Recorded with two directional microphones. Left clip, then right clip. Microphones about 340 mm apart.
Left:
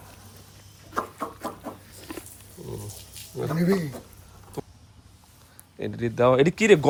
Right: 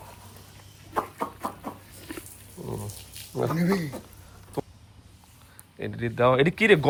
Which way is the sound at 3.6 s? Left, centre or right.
Left.